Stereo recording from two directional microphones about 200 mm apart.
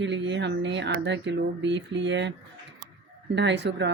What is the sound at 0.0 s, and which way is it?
Speech, 60° right (ahead or behind).